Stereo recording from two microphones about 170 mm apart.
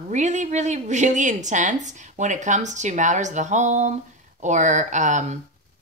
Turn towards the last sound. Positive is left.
turn(degrees=-45)  # may be behind; listen again after turning